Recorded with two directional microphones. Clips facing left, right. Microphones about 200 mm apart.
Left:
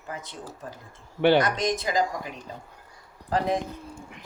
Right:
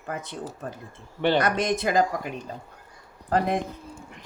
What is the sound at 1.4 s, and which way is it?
Speech, 60° right (ahead or behind).